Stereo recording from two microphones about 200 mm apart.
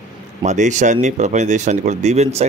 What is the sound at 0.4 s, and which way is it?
Speech, 35° right (ahead or behind).